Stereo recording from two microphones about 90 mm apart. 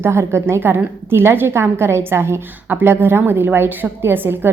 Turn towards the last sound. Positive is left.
turn(degrees=-25)  # may be behind; listen again after turning